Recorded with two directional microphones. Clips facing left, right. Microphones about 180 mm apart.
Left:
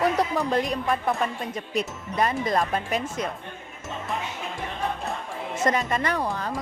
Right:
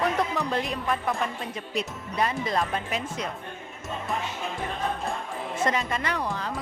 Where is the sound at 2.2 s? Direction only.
45° left (ahead or behind).